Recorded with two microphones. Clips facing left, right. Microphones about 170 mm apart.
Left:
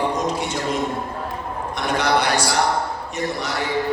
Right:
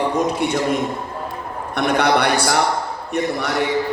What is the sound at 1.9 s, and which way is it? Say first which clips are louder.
Speech: right 2 dB; 60° right (ahead or behind).